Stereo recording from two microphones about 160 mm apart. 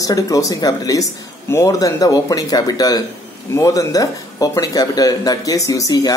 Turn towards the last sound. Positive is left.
turn(degrees=20)  # may be behind; listen again after turning